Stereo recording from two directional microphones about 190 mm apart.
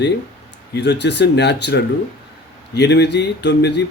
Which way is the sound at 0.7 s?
65° left (ahead or behind).